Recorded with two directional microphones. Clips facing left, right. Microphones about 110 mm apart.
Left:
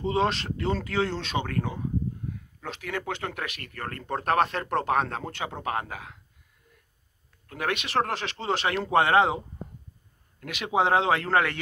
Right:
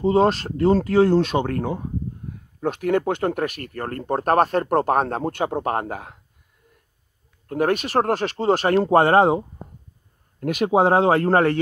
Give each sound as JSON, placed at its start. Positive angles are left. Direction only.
{"t": 0.0, "sound": "speech", "side_deg": -40}
{"t": 7.4, "sound": "speech", "side_deg": -40}
{"t": 10.4, "sound": "speech", "side_deg": -45}